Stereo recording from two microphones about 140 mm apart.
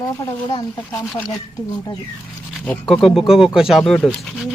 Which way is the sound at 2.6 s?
5° left (ahead or behind).